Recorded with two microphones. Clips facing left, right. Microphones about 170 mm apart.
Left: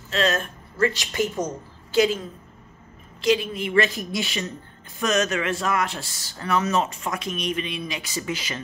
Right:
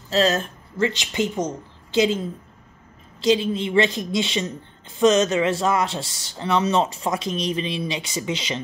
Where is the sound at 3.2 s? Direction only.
25° right (ahead or behind).